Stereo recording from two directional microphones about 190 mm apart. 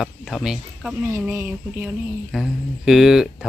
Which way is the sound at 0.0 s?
Centre (ahead or behind).